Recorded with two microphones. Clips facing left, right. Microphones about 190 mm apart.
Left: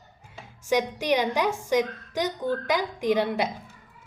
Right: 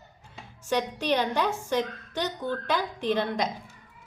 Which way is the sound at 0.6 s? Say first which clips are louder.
Left 3 dB; 10° left (ahead or behind).